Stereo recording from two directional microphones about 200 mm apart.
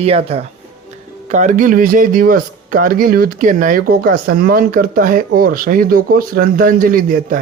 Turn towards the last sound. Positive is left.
turn(degrees=-45)  # may be behind; listen again after turning